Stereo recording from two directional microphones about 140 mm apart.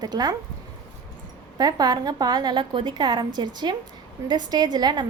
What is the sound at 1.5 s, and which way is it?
A woman's voice, 30° right (ahead or behind).